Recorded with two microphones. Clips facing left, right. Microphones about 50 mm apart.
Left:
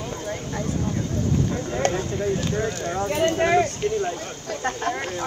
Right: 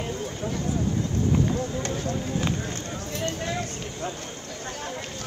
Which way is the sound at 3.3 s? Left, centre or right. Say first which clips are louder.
Left 11 dB; left.